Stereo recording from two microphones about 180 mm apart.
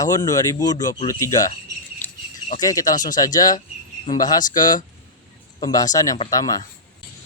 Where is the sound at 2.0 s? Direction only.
10° left (ahead or behind).